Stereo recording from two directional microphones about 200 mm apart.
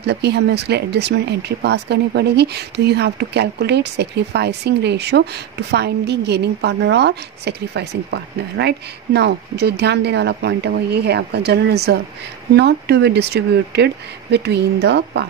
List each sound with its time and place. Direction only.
0.0 s speech: 55° right (ahead or behind)